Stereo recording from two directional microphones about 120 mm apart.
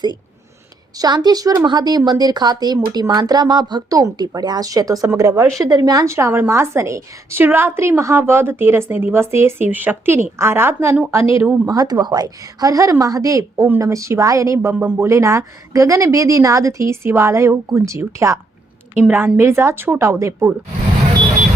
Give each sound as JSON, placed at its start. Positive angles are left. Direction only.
{"t": 0.9, "sound": "a woman's voice", "side_deg": -35}
{"t": 11.6, "sound": "a woman's voice", "side_deg": -30}